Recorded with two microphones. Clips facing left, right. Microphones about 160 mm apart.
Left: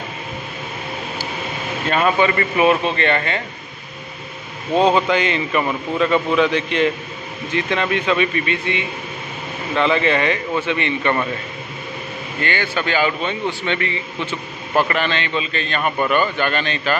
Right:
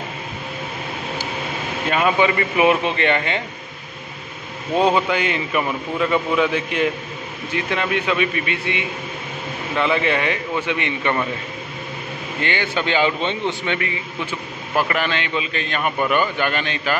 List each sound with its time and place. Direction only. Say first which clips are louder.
1.9 s a man's voice: left 1 dB; 10° right (ahead or behind)
4.9 s a man's voice: left 2 dB; 10° right (ahead or behind)
12.4 s a man's voice: even; 20° right (ahead or behind)
13.7 s a man's voice: left 2 dB; 10° right (ahead or behind)